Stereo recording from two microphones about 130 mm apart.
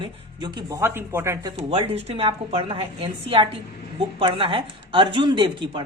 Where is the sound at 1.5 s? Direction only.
50° right (ahead or behind).